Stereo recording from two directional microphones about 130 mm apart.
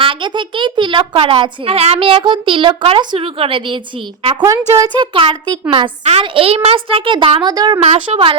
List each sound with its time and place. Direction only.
0.0 s a child's voice: 40° right (ahead or behind)
4.4 s speech: 25° right (ahead or behind)
5.1 s a child's voice: 40° right (ahead or behind)
7.9 s a child's voice: 45° right (ahead or behind)